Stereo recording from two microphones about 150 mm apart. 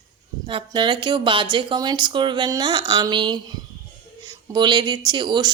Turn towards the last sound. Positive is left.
turn(degrees=-30)  # may be behind; listen again after turning